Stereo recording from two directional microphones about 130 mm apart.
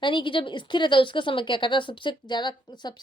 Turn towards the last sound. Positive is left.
turn(degrees=35)  # may be behind; listen again after turning